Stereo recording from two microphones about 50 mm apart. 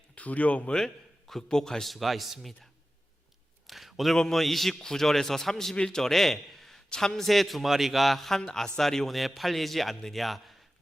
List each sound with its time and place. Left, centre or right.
0.2 s speech: left
1.3 s a man's voice: centre
1.9 s a man's voice: centre
3.7 s a sound: centre
4.2 s a man's voice: centre